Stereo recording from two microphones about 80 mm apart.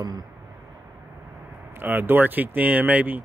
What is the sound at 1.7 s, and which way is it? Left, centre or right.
Speech, right.